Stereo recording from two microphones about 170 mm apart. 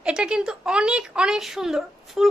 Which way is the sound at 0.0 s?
5° right (ahead or behind).